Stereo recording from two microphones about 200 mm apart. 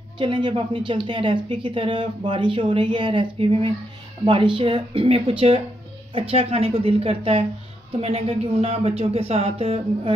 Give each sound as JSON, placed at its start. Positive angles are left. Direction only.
{"t": 0.2, "sound": "speech", "side_deg": -25}